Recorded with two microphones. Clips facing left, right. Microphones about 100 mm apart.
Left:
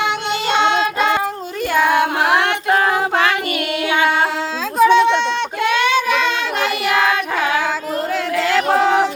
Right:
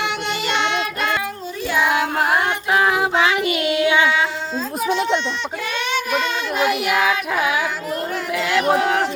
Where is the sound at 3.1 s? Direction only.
55° left (ahead or behind).